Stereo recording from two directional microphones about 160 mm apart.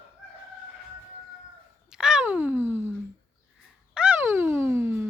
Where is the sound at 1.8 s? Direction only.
5° right (ahead or behind).